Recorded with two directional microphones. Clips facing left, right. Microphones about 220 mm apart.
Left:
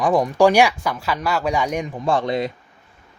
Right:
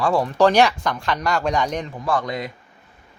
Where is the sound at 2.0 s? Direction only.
25° left (ahead or behind).